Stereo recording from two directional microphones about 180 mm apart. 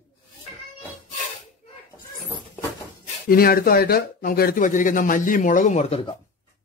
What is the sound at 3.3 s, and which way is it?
Speech, 55° left (ahead or behind).